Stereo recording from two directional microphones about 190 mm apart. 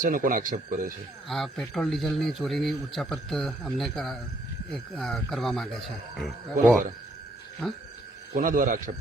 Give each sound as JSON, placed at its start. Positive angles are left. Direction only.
{"t": 0.0, "sound": "speech", "side_deg": -45}
{"t": 1.3, "sound": "speech", "side_deg": 0}
{"t": 8.3, "sound": "speech", "side_deg": -45}